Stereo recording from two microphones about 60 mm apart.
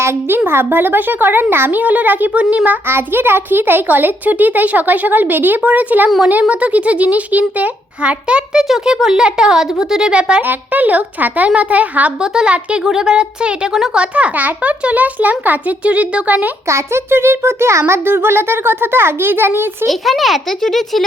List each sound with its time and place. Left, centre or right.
0.0 s a child's voice: right
1.8 s a child's voice: right
2.8 s a child's voice: right; by 10.4 s centre
10.4 s a child's voice: right
12.2 s a child's voice: centre
16.6 s a child's voice: right
19.9 s a child's voice: centre